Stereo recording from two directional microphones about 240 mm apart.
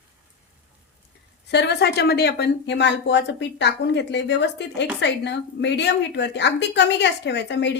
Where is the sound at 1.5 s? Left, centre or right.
Left.